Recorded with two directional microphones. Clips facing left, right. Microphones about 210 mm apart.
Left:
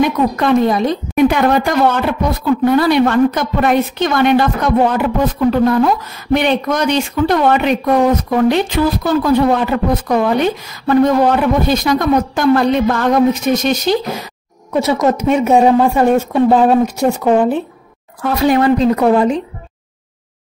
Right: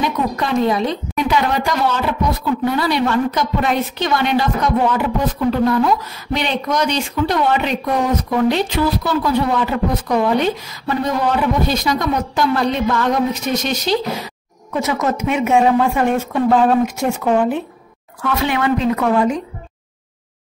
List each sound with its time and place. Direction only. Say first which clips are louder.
0.0 s a woman's voice: left 6 dB; 55° left (ahead or behind)
14.8 s speech: left 5 dB; 35° left (ahead or behind)